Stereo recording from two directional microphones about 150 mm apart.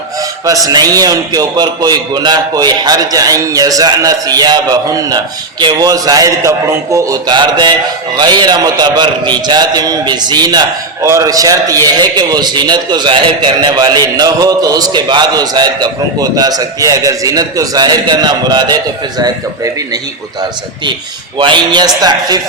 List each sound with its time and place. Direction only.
0.4 s a man's voice: 25° right (ahead or behind)
21.3 s a man's voice: 30° right (ahead or behind)